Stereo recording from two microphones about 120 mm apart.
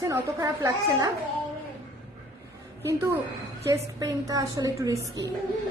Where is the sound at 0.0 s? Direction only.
25° right (ahead or behind).